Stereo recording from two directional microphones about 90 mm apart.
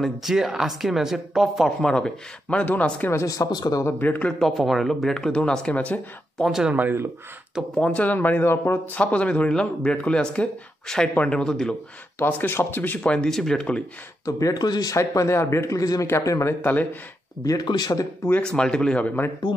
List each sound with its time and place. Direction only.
0.0 s speech: 5° right (ahead or behind); by 3.1 s 20° left (ahead or behind)
3.1 s speech: 35° left (ahead or behind)
3.8 s speech: 20° left (ahead or behind)
4.4 s speech: centre (ahead or behind); by 6.4 s 15° left (ahead or behind)
6.4 s speech: 5° right (ahead or behind)
6.7 s speech: 20° right (ahead or behind)
7.7 s speech: 15° left (ahead or behind)
12.2 s speech: 20° left (ahead or behind)
14.2 s speech: 40° left (ahead or behind)
15.0 s speech: 30° left (ahead or behind)
17.6 s speech: 50° left (ahead or behind)
18.4 s speech: 10° left (ahead or behind)